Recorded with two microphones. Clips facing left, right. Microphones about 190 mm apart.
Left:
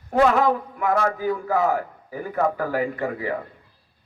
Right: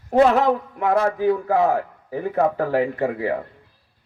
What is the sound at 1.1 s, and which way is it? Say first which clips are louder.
Speech: right 5 dB; 70° right (ahead or behind).